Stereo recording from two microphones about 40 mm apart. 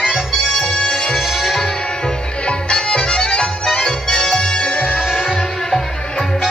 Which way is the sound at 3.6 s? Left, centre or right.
Centre.